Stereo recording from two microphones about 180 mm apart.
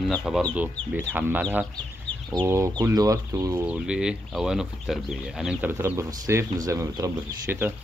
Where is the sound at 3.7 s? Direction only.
5° right (ahead or behind).